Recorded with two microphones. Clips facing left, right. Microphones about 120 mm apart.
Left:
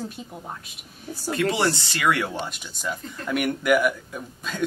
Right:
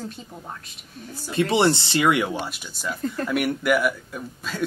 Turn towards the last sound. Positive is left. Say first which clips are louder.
# right 1 dB
turn(degrees=0)  # may be behind; listen again after turning